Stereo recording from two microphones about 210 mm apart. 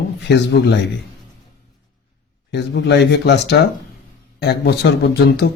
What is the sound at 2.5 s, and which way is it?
Speech, 55° left (ahead or behind).